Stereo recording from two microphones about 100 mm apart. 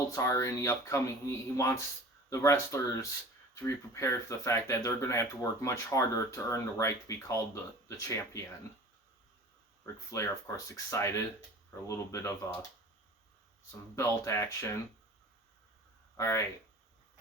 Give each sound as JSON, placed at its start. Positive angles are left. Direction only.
{"t": 0.1, "sound": "speech", "side_deg": 30}
{"t": 9.8, "sound": "speech", "side_deg": 30}
{"t": 13.9, "sound": "speech", "side_deg": 30}
{"t": 16.1, "sound": "speech", "side_deg": 30}